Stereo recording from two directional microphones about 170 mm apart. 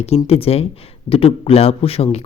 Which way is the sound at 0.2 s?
35° left (ahead or behind).